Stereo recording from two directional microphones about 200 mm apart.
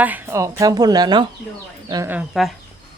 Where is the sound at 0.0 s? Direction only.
10° right (ahead or behind).